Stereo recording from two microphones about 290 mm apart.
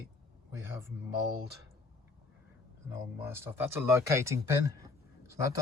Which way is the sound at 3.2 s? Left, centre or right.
Centre.